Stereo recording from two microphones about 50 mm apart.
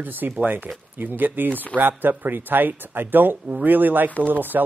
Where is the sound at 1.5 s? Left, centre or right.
Left.